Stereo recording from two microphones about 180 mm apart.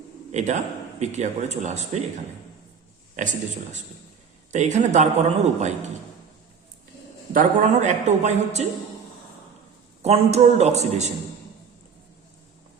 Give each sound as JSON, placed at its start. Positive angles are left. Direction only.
{"t": 0.3, "sound": "speech", "side_deg": -40}
{"t": 3.2, "sound": "speech", "side_deg": -40}
{"t": 7.3, "sound": "speech", "side_deg": -40}
{"t": 10.0, "sound": "speech", "side_deg": -35}